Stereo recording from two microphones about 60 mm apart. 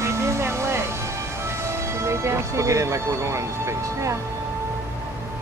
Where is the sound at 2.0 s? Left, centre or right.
Right.